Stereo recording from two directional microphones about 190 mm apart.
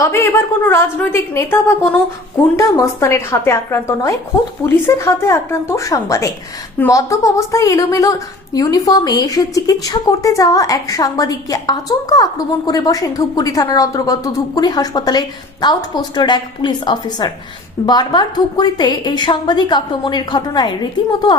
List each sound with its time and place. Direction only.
0.0 s a woman's voice: 15° left (ahead or behind)